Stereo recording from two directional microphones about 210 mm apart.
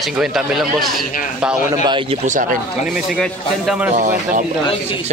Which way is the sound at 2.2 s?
40° right (ahead or behind).